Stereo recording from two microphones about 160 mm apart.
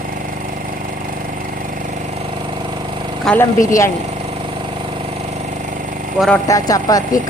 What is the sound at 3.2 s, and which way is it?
Speech, 10° left (ahead or behind).